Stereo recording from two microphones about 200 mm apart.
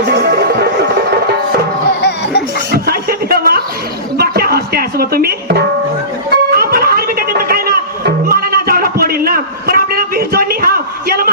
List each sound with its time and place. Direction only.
0.2 s music: 50° right (ahead or behind)
2.0 s music: 55° left (ahead or behind)
2.7 s a sound: 50° right (ahead or behind)
4.2 s music: 50° right (ahead or behind)